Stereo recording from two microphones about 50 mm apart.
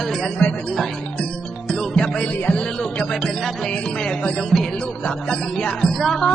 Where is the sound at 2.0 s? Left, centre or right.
Centre.